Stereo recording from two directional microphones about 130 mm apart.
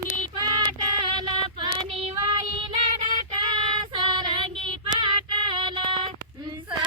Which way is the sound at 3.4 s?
40° right (ahead or behind).